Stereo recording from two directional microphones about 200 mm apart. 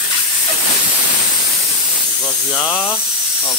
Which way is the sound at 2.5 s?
5° left (ahead or behind).